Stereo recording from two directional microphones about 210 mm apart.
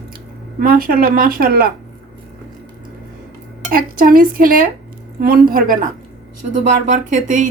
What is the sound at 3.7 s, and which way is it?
Speech, 45° right (ahead or behind).